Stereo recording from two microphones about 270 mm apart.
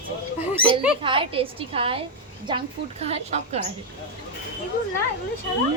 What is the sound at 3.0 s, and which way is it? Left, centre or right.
Speech, right.